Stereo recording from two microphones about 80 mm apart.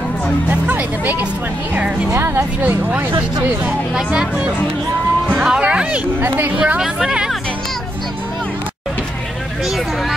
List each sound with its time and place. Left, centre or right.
0.5 s speech: right
2.0 s speech: right
2.6 s speech: right
3.9 s speech: centre
6.2 s speech: right
6.5 s speech: centre